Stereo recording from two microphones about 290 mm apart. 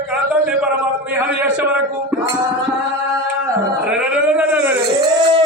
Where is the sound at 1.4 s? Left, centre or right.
Centre.